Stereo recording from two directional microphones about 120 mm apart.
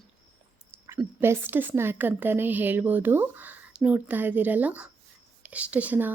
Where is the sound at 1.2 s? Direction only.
20° right (ahead or behind).